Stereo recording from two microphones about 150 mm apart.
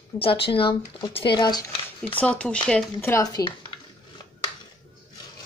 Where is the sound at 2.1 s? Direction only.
10° left (ahead or behind).